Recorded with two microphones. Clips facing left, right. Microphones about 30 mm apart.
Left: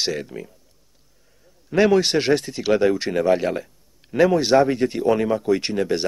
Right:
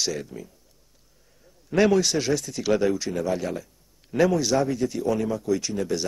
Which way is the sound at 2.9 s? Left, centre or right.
Left.